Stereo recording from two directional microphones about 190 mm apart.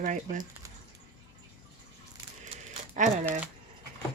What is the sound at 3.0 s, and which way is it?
Speech, 40° right (ahead or behind).